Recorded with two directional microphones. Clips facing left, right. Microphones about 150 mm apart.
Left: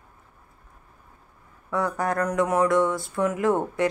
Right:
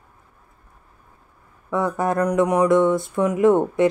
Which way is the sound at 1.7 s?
20° right (ahead or behind).